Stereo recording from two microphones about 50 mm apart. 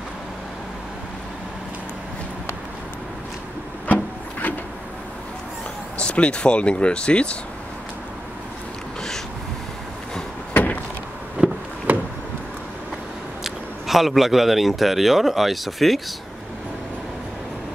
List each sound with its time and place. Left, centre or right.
3.8 s wood: left
5.9 s speech: left
10.5 s door: left
11.4 s a sound: right
13.4 s a man's voice: centre